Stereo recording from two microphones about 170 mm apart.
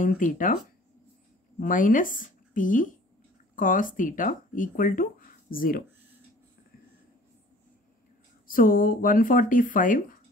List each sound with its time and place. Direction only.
0.0 s speech: 50° left (ahead or behind)
1.6 s speech: 50° left (ahead or behind)
8.5 s speech: 55° left (ahead or behind)